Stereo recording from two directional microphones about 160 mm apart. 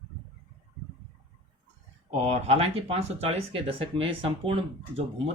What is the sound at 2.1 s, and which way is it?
Speech, 40° right (ahead or behind).